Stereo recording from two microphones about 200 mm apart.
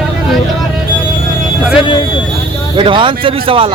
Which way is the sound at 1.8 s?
25° left (ahead or behind).